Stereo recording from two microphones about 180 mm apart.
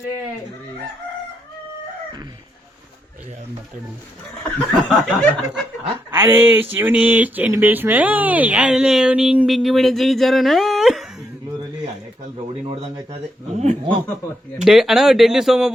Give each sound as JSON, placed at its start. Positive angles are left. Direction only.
{"t": 4.5, "sound": "speech", "side_deg": 0}
{"t": 6.1, "sound": "a sound", "side_deg": -10}
{"t": 12.6, "sound": "a man's voice", "side_deg": -30}
{"t": 14.6, "sound": "speech", "side_deg": 0}